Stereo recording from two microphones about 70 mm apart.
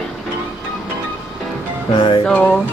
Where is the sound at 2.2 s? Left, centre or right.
Centre.